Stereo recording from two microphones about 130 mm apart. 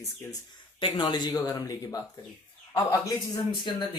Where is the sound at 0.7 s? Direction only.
40° left (ahead or behind).